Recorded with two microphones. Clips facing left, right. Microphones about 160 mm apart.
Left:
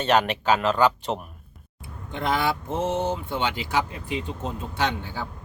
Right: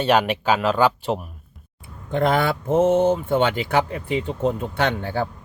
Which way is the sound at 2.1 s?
55° right (ahead or behind).